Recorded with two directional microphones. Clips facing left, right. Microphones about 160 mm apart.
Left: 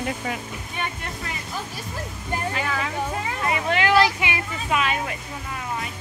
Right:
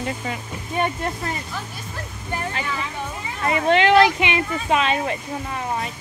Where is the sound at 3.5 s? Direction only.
30° right (ahead or behind).